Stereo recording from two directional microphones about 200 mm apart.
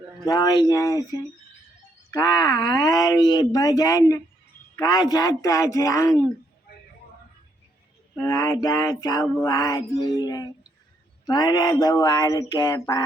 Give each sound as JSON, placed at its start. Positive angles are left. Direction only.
{"t": 0.3, "sound": "speech", "side_deg": 20}
{"t": 2.0, "sound": "speech", "side_deg": 20}
{"t": 4.8, "sound": "mantra", "side_deg": 20}
{"t": 8.1, "sound": "mantra", "side_deg": 15}
{"t": 9.9, "sound": "speech", "side_deg": 20}